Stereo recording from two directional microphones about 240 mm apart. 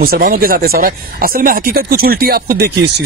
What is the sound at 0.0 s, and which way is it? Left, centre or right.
Speech, right.